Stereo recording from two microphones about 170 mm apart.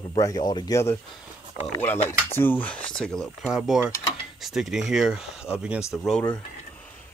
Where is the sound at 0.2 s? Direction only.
20° left (ahead or behind); by 5.9 s 5° right (ahead or behind).